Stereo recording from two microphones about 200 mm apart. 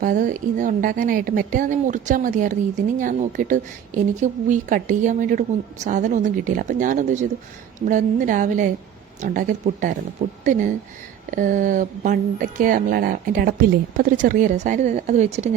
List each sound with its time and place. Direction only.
0.0 s a woman's voice: 40° right (ahead or behind)